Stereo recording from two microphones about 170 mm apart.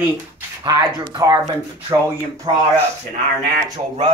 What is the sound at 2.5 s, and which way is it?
Speech, 30° right (ahead or behind).